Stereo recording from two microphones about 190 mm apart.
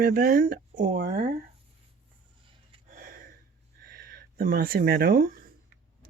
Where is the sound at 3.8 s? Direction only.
50° right (ahead or behind).